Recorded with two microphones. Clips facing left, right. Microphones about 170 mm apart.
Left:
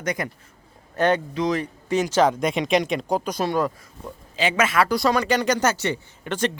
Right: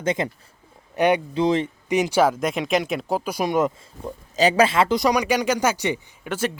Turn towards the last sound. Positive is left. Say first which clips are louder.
# left 1 dB
turn(degrees=-5)  # may be behind; listen again after turning